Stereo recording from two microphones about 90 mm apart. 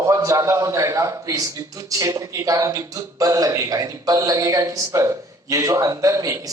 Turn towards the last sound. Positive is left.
turn(degrees=-35)  # may be behind; listen again after turning